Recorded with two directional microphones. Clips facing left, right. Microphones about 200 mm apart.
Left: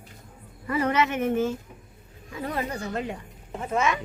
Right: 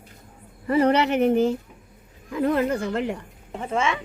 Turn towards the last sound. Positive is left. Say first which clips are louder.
# right 1 dB
turn(degrees=-25)  # may be behind; listen again after turning